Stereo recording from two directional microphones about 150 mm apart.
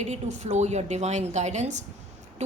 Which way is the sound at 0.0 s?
50° right (ahead or behind).